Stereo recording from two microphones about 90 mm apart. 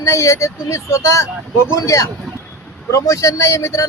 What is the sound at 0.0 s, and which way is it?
Speech, 35° left (ahead or behind).